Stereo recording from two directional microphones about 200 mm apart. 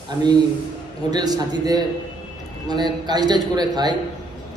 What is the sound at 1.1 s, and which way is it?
A man's voice, 20° right (ahead or behind).